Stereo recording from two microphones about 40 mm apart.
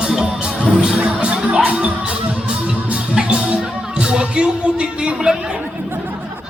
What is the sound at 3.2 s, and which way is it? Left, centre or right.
Music, right.